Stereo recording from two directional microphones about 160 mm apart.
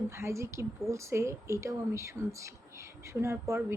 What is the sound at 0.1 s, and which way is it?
A woman's voice, 15° right (ahead or behind).